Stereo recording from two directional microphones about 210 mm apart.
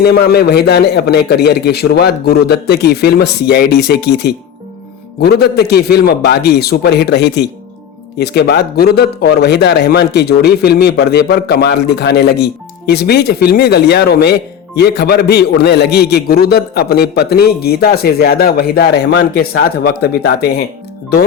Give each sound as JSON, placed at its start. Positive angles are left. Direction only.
{"t": 0.0, "sound": "a man's voice", "side_deg": 50}